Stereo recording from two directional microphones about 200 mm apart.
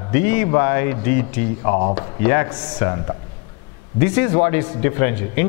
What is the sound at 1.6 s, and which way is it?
A man's voice, 30° left (ahead or behind).